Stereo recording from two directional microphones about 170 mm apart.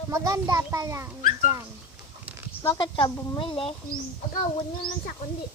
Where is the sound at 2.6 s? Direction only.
25° left (ahead or behind).